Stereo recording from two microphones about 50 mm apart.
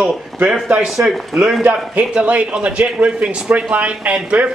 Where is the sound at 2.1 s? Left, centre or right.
Right.